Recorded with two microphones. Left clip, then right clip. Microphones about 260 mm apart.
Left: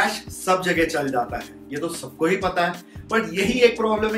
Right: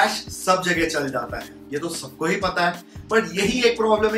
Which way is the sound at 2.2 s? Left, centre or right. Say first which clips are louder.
Even; centre.